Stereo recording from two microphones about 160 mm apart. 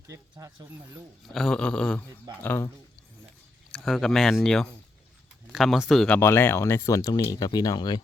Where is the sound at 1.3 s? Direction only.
5° left (ahead or behind).